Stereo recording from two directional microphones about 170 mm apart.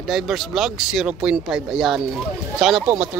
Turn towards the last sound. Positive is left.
turn(degrees=-5)  # may be behind; listen again after turning